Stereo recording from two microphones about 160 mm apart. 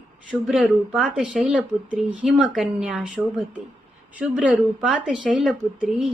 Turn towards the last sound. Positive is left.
turn(degrees=0)  # may be behind; listen again after turning